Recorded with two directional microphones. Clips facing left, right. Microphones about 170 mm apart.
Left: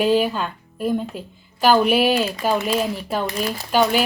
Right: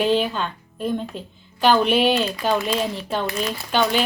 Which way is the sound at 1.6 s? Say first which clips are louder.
Left 1 dB; 5° left (ahead or behind).